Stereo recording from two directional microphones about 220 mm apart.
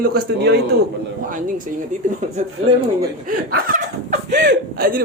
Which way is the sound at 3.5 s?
35° right (ahead or behind).